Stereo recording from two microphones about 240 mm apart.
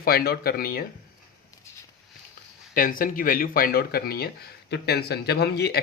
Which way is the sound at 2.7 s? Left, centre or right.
Left.